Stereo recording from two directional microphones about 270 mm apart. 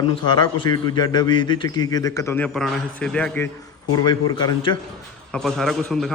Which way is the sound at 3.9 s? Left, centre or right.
Centre.